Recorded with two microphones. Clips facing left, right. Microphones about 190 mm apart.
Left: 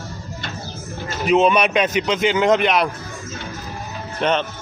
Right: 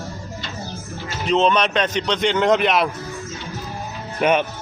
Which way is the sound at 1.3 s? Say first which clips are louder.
Left 2 dB; 10° left (ahead or behind).